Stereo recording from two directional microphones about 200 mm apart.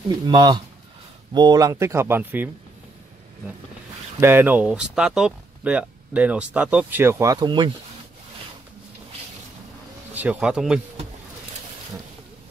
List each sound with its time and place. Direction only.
0.3 s speech: 20° right (ahead or behind)
4.2 s speech: 10° right (ahead or behind)
10.1 s speech: 5° right (ahead or behind)